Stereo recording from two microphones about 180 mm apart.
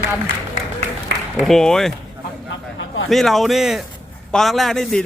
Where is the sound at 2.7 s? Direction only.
90° left.